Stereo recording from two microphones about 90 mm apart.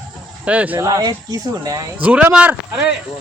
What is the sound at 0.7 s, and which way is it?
Speech, 40° right (ahead or behind).